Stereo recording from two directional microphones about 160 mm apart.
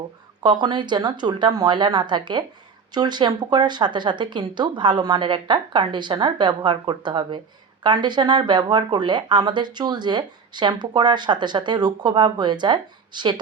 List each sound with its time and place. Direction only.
0.4 s speech: 25° right (ahead or behind)